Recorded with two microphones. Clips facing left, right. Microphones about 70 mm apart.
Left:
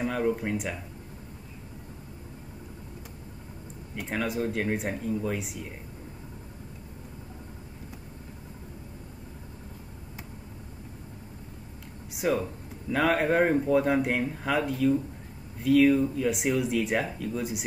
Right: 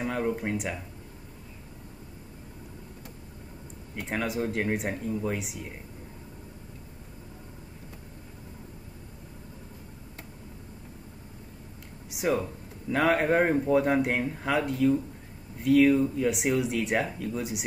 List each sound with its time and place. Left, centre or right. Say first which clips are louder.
0.3 s speech: left 1 dB; centre
4.0 s speech: even; centre
12.1 s a sound: even; centre
12.9 s speech: right 1 dB; centre